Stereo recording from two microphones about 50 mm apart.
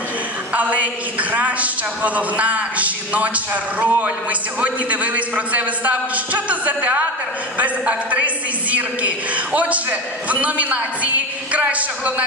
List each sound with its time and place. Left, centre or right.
0.6 s a woman's voice: right